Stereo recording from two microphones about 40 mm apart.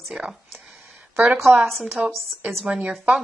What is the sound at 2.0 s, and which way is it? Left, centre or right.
Speech, right.